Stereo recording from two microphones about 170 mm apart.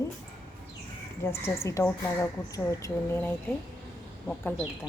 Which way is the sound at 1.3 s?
15° left (ahead or behind).